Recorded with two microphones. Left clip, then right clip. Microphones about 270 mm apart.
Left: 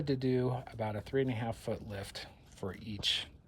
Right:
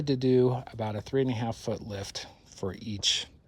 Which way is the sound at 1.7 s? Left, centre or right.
Right.